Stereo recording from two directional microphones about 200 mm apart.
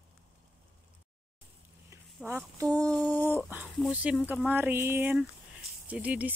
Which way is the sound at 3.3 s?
10° right (ahead or behind).